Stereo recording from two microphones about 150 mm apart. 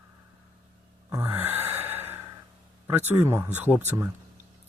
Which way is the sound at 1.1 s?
15° right (ahead or behind).